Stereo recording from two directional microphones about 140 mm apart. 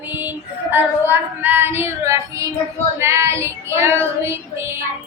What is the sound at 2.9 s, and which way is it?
Female singing, 20° right (ahead or behind).